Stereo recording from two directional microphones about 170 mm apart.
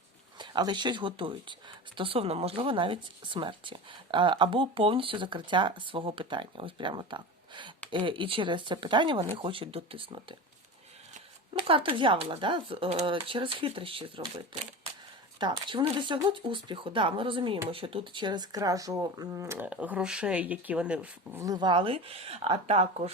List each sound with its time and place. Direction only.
0.3 s speech: 25° right (ahead or behind)
11.7 s speech: 30° right (ahead or behind); by 21.4 s 10° right (ahead or behind)
21.4 s speech: 25° right (ahead or behind)